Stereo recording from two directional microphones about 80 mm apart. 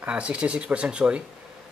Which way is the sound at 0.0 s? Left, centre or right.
Centre.